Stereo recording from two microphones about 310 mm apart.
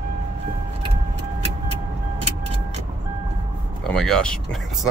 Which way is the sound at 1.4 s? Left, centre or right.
Centre.